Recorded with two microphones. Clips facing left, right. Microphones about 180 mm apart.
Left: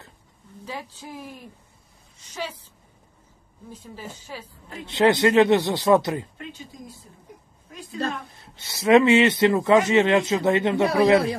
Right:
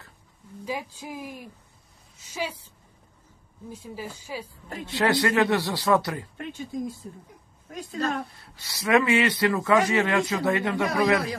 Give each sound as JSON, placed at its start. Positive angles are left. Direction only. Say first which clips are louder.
{"t": 0.7, "sound": "a woman's voice", "louder": "right 3 dB", "side_deg": -10}
{"t": 3.8, "sound": "a woman's voice", "louder": "right 2 dB", "side_deg": -10}
{"t": 4.8, "sound": "a man's voice", "louder": "left 5 dB", "side_deg": 20}
{"t": 8.5, "sound": "a man's voice", "louder": "left 6 dB", "side_deg": 25}